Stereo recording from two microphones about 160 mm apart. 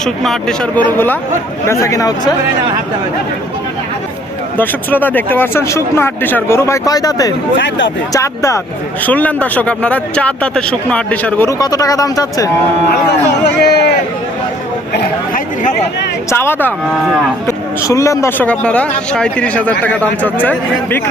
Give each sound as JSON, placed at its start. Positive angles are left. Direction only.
{"t": 0.0, "sound": "speech", "side_deg": 5}
{"t": 4.5, "sound": "speech", "side_deg": 10}
{"t": 11.6, "sound": "speech", "side_deg": 25}
{"t": 12.9, "sound": "speech", "side_deg": 90}
{"t": 16.3, "sound": "speech", "side_deg": 15}